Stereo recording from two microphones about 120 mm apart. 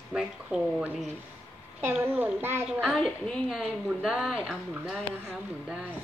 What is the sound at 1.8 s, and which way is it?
A woman's voice, 20° right (ahead or behind).